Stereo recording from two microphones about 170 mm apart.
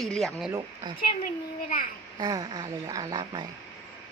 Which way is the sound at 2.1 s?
25° right (ahead or behind).